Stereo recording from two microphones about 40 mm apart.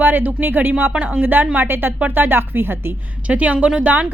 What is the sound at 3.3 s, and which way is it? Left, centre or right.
Speech, right.